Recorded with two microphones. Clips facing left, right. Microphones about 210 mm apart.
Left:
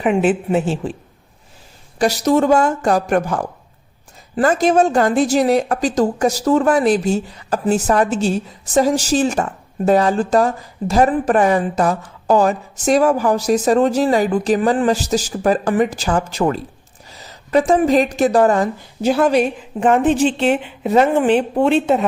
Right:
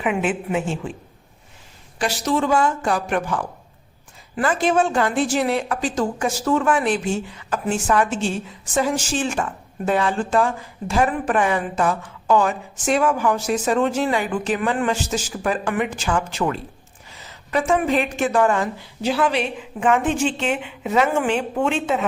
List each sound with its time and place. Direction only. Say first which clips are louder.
0.0 s a woman's voice: left 6 dB; 35° left (ahead or behind)
2.0 s a woman's voice: left 7 dB; 40° left (ahead or behind)